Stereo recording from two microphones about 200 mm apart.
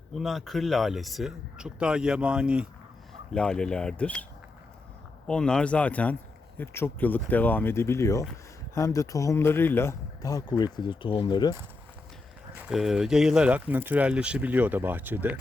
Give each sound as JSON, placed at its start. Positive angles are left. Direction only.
{"t": 0.1, "sound": "speech", "side_deg": 0}
{"t": 5.3, "sound": "speech", "side_deg": 5}
{"t": 12.5, "sound": "speech", "side_deg": -5}